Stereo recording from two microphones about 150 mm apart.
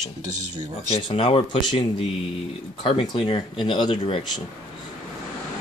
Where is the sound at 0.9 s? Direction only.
40° left (ahead or behind).